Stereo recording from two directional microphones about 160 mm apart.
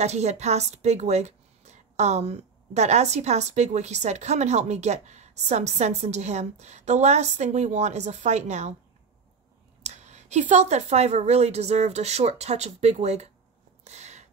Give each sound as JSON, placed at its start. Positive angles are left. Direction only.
{"t": 0.0, "sound": "a woman's voice", "side_deg": -45}
{"t": 9.8, "sound": "a woman's voice", "side_deg": -45}
{"t": 13.8, "sound": "a sound", "side_deg": -45}